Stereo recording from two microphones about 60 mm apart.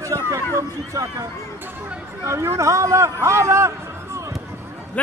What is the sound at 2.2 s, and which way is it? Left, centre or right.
A man's voice, right.